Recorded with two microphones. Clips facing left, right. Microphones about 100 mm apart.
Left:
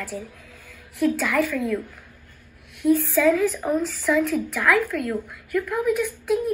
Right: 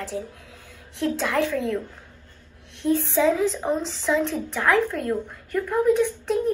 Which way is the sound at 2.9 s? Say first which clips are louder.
Left 2 dB; 20° right (ahead or behind).